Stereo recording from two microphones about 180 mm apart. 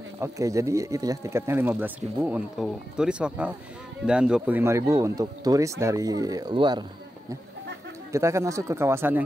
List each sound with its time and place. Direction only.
0.2 s speech: 15° right (ahead or behind)
8.1 s speech: 15° right (ahead or behind)